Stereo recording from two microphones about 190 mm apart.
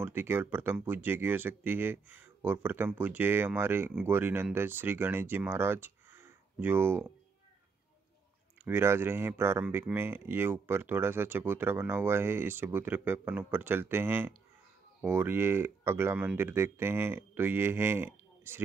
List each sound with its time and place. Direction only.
0.0 s speech: 10° right (ahead or behind)
8.6 s speech: 15° right (ahead or behind)